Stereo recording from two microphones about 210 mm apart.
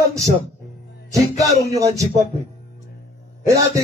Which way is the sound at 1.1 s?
15° right (ahead or behind).